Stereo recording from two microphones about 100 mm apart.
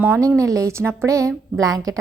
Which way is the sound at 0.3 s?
35° right (ahead or behind).